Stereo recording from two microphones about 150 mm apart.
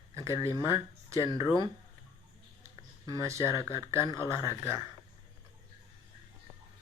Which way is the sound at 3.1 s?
20° right (ahead or behind).